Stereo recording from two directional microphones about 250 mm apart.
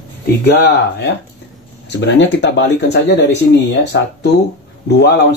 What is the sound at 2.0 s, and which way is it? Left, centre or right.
Speech, left.